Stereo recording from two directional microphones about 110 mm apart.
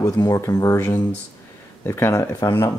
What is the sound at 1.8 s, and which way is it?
Speech, 20° left (ahead or behind).